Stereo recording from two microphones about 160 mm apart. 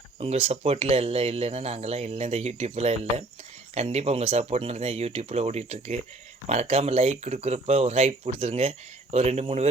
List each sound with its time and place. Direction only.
0.2 s speech: 40° right (ahead or behind)